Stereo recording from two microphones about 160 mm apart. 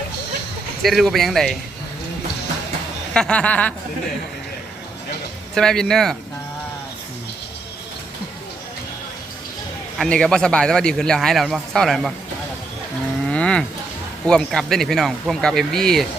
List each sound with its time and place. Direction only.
0.8 s a man's voice: centre (ahead or behind)
3.1 s speech: 5° left (ahead or behind)
5.5 s a man's voice: 5° left (ahead or behind)
10.0 s a man's voice: 5° left (ahead or behind)
13.2 s cattle: 5° left (ahead or behind)
14.3 s a man's voice: 5° left (ahead or behind)